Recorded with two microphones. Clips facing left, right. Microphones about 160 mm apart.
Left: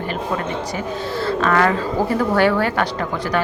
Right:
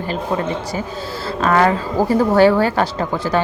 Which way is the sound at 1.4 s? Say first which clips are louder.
Right 3 dB; 30° right (ahead or behind).